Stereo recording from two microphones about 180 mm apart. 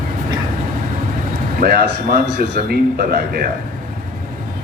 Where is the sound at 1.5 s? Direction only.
60° right (ahead or behind).